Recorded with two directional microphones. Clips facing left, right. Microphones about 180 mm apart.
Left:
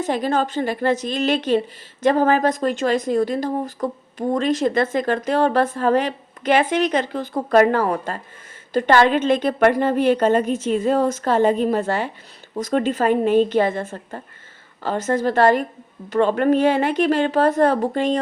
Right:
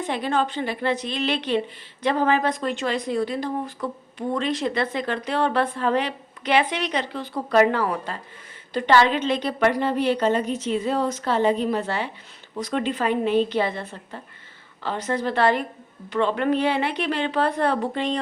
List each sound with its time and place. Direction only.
0.0 s speech: 40° left (ahead or behind)